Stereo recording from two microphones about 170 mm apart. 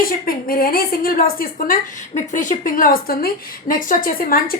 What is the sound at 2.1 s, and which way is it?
A woman's voice, 45° left (ahead or behind).